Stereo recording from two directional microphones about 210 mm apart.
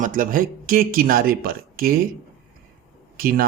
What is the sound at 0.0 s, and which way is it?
Speech, 40° right (ahead or behind).